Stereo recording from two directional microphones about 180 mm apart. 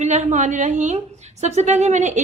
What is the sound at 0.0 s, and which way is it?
A woman's voice, 40° right (ahead or behind).